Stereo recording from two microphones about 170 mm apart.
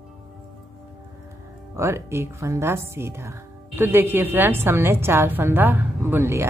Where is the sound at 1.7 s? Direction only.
15° right (ahead or behind).